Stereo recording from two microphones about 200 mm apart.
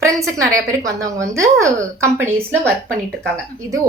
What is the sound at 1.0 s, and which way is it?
A woman's voice, 15° right (ahead or behind).